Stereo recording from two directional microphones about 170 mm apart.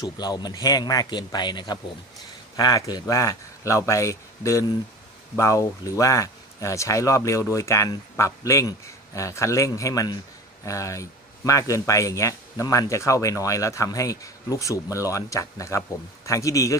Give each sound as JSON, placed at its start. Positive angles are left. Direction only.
{"t": 0.0, "sound": "speech", "side_deg": 25}